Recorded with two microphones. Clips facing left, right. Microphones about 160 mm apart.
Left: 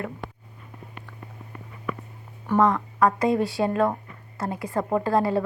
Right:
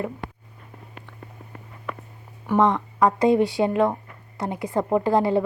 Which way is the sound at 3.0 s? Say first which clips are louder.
Right 3 dB; 20° right (ahead or behind).